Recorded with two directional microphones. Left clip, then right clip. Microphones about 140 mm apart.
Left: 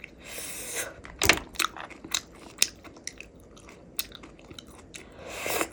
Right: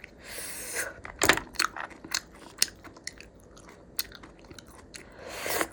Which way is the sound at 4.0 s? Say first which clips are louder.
Even; 25° left (ahead or behind).